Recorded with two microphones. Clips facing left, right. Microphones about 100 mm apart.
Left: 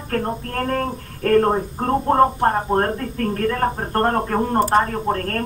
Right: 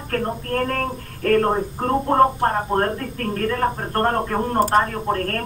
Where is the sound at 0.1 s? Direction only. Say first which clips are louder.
Even; 30° left (ahead or behind).